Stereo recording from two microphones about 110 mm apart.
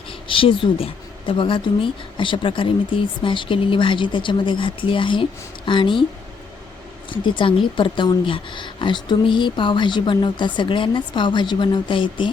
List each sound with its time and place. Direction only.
0.3 s speech: 50° left (ahead or behind)
7.1 s speech: 50° left (ahead or behind)